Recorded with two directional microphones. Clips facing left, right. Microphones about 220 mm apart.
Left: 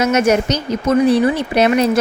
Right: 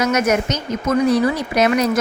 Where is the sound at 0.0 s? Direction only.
25° left (ahead or behind).